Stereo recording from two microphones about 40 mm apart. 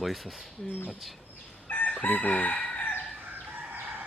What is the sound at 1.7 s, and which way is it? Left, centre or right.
Chicken, left.